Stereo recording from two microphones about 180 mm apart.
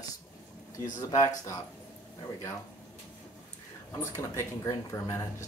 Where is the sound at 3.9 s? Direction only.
15° left (ahead or behind).